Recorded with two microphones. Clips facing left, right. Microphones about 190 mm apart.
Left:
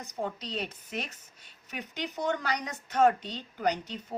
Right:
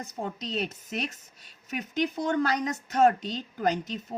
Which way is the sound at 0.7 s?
40° right (ahead or behind).